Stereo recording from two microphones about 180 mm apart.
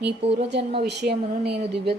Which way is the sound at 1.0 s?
65° right (ahead or behind).